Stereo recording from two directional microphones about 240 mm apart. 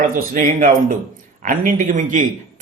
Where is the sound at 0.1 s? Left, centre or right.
Right.